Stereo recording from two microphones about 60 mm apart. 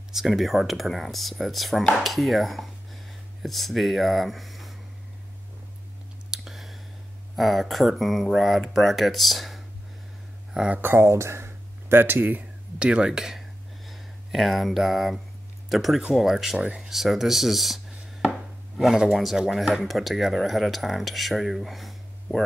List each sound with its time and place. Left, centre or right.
0.1 s speech: centre
6.3 s a sound: centre
7.3 s speech: centre
10.7 s speech: right; by 22.4 s centre